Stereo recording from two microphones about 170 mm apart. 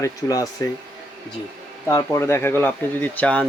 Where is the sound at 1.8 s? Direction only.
15° left (ahead or behind).